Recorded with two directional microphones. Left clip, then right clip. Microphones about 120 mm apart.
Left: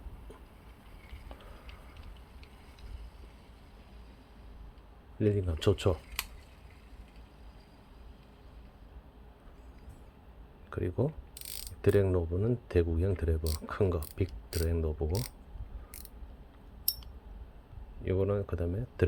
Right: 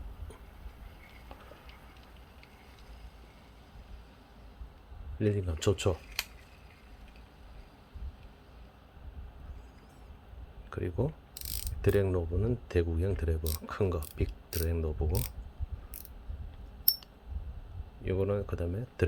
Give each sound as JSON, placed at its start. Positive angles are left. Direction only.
{"t": 5.2, "sound": "speech", "side_deg": 10}
{"t": 10.7, "sound": "speech", "side_deg": 10}
{"t": 11.3, "sound": "pulleys", "side_deg": -10}
{"t": 11.8, "sound": "speech", "side_deg": 10}
{"t": 14.2, "sound": "mechanisms", "side_deg": 15}
{"t": 14.7, "sound": "speech", "side_deg": 5}
{"t": 15.0, "sound": "speech", "side_deg": -20}
{"t": 18.0, "sound": "speech", "side_deg": 5}